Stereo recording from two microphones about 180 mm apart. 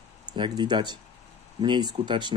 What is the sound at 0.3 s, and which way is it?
Speech, 25° right (ahead or behind).